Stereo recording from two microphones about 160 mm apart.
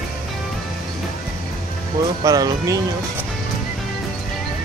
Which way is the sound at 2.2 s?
20° right (ahead or behind).